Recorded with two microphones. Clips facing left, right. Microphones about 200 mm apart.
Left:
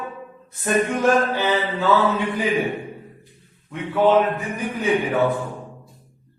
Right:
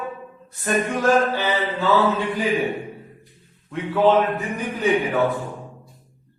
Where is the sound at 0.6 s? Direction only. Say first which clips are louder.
Left 2 dB; 20° left (ahead or behind).